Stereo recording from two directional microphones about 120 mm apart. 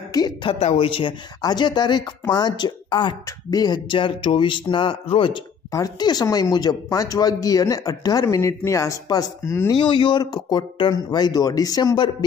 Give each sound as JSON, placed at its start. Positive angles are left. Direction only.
{"t": 0.1, "sound": "a woman's voice", "side_deg": 35}
{"t": 0.5, "sound": "speech", "side_deg": 55}
{"t": 5.7, "sound": "speech", "side_deg": 30}
{"t": 9.7, "sound": "speech", "side_deg": 40}